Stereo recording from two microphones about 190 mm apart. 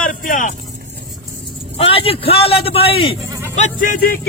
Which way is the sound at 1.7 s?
30° left (ahead or behind).